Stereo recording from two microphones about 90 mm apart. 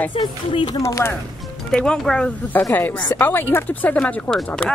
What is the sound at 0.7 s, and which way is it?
Speech, 35° left (ahead or behind).